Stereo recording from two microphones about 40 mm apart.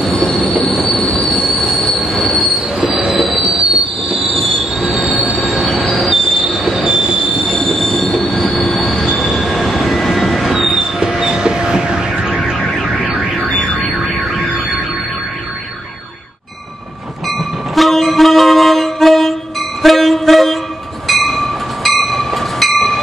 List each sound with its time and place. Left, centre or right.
0.3 s train: centre
1.5 s train wheels squealing: centre
3.1 s train: centre
4.1 s train wheels squealing: centre
7.6 s train: centre; by 12.4 s right
13.6 s music: left
17.7 s wind instrument: centre
19.8 s train: centre